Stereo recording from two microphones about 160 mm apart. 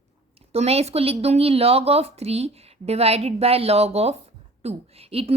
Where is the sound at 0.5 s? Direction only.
40° right (ahead or behind).